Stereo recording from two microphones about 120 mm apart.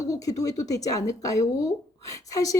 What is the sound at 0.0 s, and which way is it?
Speech, 30° left (ahead or behind).